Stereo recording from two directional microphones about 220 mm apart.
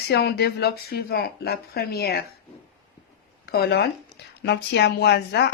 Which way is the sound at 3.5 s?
45° left (ahead or behind).